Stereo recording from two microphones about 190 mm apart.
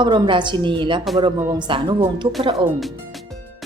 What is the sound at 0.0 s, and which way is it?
A woman's voice, 25° right (ahead or behind).